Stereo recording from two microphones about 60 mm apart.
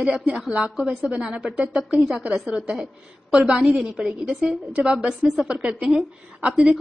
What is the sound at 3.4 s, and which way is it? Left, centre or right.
A woman's voice, centre.